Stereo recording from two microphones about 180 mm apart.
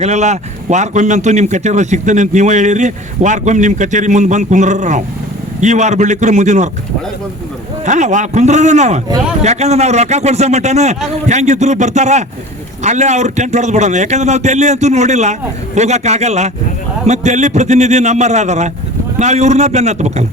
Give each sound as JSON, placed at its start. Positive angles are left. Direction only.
{"t": 0.0, "sound": "a man's voice", "side_deg": -40}
{"t": 7.9, "sound": "a man's voice", "side_deg": -40}